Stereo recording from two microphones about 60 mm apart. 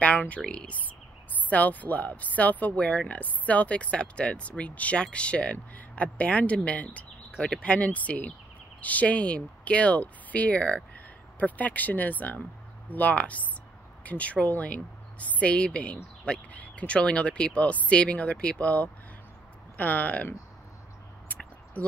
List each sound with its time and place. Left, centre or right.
0.0 s a sound: left
0.5 s speech: centre
21.8 s speech: left